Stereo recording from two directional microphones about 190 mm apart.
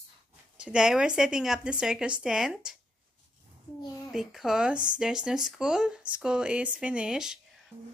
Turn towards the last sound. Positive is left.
turn(degrees=-5)  # may be behind; listen again after turning